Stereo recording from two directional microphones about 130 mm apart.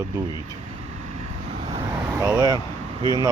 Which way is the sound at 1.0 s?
60° right (ahead or behind).